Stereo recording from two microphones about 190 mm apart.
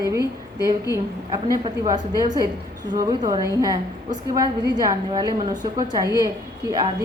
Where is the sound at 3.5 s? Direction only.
20° right (ahead or behind).